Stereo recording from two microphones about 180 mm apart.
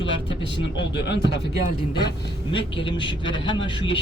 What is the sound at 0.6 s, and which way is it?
Speech, 75° left (ahead or behind).